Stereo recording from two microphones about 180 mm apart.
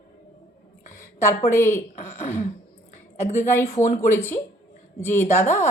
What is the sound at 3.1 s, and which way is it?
Speech, 15° left (ahead or behind).